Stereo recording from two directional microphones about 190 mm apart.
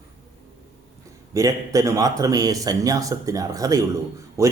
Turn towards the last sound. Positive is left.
turn(degrees=-15)  # may be behind; listen again after turning